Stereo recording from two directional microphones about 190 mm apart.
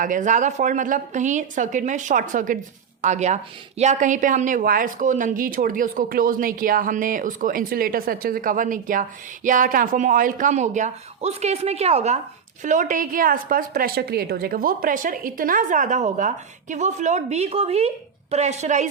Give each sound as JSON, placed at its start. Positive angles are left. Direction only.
{"t": 0.0, "sound": "a woman's voice", "side_deg": -45}